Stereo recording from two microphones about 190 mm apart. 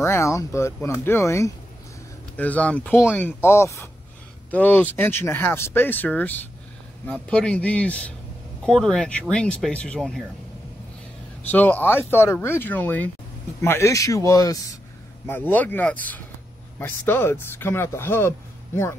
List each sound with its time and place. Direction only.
0.0 s speech: 15° left (ahead or behind)
11.5 s speech: 10° left (ahead or behind)